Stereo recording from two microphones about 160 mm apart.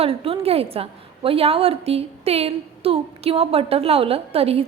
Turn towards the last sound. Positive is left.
turn(degrees=-40)  # may be behind; listen again after turning